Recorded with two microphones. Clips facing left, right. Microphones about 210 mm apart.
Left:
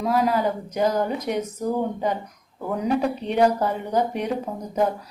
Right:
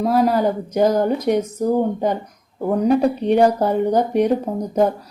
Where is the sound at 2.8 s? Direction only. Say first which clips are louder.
Right 6 dB; 35° right (ahead or behind).